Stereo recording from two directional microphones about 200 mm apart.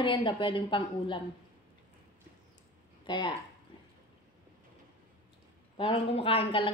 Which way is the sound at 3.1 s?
25° left (ahead or behind).